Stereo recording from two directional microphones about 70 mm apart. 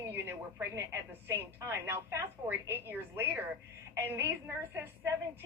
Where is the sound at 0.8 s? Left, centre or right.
Right.